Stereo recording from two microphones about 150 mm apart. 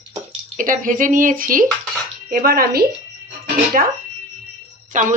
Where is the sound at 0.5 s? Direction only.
65° right (ahead or behind).